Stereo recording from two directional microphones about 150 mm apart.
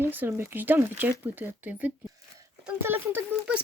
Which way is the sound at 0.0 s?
15° right (ahead or behind).